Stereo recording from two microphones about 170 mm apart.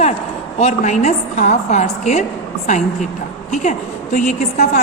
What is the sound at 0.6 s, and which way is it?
A woman's voice, 40° left (ahead or behind).